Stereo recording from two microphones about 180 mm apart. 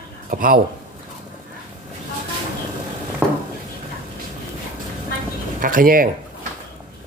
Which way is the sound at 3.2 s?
10° right (ahead or behind).